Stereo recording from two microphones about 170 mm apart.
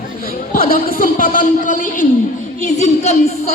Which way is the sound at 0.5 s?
55° left (ahead or behind).